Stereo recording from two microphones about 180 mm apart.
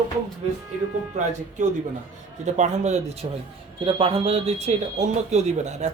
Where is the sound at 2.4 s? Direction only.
40° right (ahead or behind).